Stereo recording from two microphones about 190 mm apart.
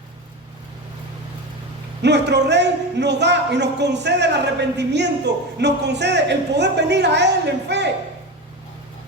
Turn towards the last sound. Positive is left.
turn(degrees=-65)  # may be behind; listen again after turning